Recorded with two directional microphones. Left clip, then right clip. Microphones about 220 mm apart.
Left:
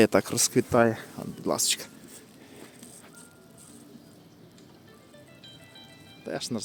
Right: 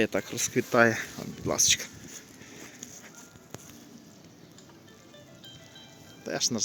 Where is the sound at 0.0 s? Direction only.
35° left (ahead or behind).